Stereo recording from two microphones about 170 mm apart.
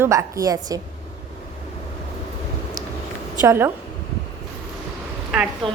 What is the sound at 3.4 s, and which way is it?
Speech, 15° right (ahead or behind).